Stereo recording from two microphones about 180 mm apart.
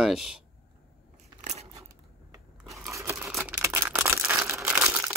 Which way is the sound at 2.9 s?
15° right (ahead or behind).